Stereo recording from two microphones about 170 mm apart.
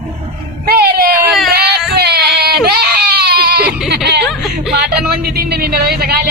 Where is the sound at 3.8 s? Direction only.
70° right (ahead or behind).